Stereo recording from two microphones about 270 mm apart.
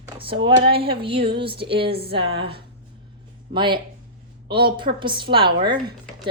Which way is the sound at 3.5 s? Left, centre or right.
Centre.